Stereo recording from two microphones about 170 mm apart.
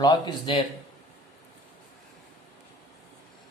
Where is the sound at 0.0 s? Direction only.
25° left (ahead or behind).